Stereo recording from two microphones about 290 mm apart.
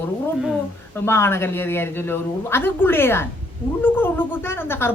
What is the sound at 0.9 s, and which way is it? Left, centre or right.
A woman's voice, centre.